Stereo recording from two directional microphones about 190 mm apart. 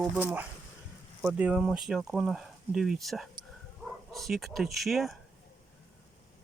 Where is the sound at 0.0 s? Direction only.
10° right (ahead or behind).